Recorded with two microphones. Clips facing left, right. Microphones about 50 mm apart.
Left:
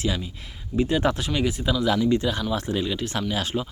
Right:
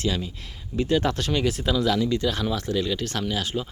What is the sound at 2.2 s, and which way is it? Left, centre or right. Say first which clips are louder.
Speech: even; left.